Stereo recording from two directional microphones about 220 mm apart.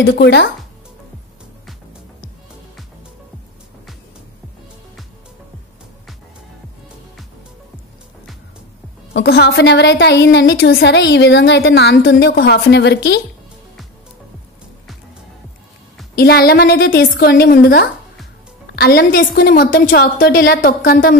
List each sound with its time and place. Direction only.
0.2 s a woman's voice: 50° left (ahead or behind)
9.1 s a woman's voice: 45° left (ahead or behind)
16.2 s a woman's voice: 45° left (ahead or behind)